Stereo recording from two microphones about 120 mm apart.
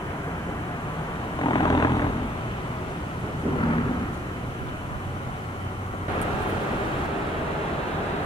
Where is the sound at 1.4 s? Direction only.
35° left (ahead or behind).